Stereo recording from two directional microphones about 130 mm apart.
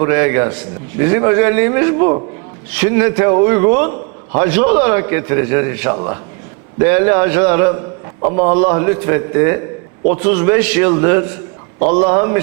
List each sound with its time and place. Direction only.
0.0 s a man's voice: 20° right (ahead or behind)